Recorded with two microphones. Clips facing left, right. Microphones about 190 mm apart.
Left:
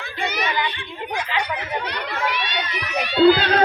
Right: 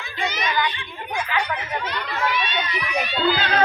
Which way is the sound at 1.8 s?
70° left (ahead or behind).